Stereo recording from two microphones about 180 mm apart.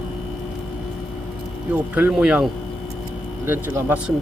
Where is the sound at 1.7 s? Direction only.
10° right (ahead or behind).